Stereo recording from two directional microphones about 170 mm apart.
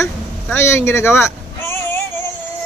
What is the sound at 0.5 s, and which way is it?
Speech, 15° left (ahead or behind).